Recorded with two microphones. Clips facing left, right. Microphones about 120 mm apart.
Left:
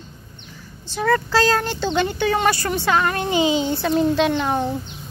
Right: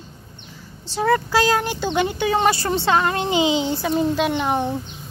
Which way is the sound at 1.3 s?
15° right (ahead or behind).